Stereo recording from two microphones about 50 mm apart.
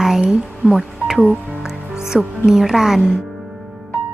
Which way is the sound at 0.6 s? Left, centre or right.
Centre.